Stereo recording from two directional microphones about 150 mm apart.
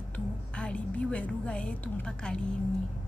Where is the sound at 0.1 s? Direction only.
10° left (ahead or behind).